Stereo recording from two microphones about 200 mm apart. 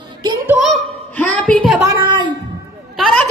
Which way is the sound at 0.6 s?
5° left (ahead or behind).